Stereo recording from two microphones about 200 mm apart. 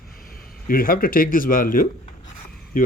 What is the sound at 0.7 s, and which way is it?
Speech, 45° left (ahead or behind).